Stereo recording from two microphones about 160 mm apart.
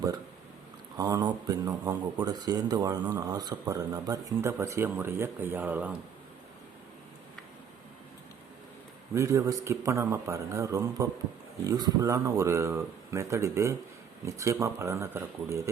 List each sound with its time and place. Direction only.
0.9 s speech: 25° right (ahead or behind)
9.1 s speech: 20° right (ahead or behind)